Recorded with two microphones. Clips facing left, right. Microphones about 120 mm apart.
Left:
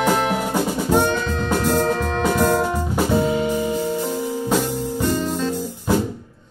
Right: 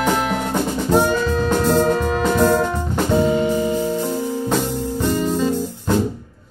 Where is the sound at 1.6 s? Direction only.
5° right (ahead or behind).